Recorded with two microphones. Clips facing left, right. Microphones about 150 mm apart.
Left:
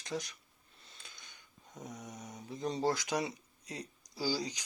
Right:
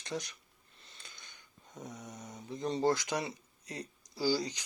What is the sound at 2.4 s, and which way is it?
Speech, 5° left (ahead or behind).